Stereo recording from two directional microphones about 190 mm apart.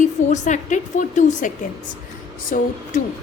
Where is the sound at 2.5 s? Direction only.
45° left (ahead or behind).